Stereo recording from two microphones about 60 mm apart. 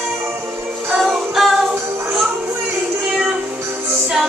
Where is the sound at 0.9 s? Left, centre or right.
Centre.